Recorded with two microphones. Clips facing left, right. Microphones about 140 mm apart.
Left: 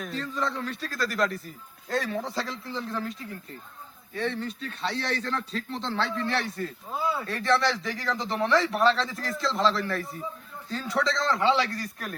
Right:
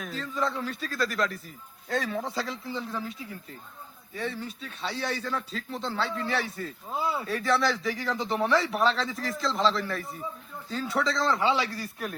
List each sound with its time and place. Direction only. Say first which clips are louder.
0.0 s a man's voice: even; centre (ahead or behind)
7.0 s speech: left 1 dB; 20° right (ahead or behind)
7.3 s a man's voice: left 1 dB; centre (ahead or behind)